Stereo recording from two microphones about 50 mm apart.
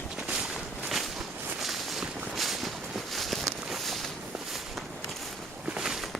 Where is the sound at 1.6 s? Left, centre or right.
Centre.